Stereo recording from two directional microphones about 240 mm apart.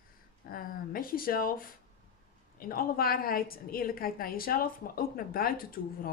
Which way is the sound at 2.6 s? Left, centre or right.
Left.